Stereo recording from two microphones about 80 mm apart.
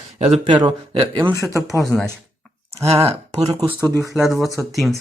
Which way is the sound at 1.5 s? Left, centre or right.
Right.